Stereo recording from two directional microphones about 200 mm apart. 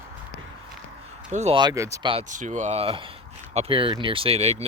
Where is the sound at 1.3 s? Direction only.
35° right (ahead or behind).